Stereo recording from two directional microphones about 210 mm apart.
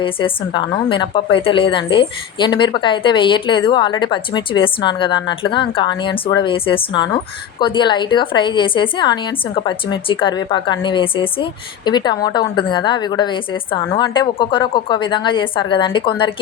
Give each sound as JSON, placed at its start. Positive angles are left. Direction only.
{"t": 0.0, "sound": "a woman's voice", "side_deg": 25}